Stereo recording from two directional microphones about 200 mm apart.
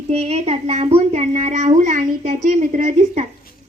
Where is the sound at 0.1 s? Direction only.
30° right (ahead or behind).